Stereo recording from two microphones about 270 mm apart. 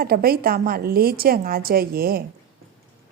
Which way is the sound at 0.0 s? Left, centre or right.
Right.